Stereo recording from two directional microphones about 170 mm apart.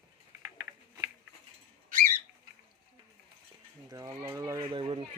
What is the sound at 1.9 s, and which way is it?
Bird, 55° right (ahead or behind).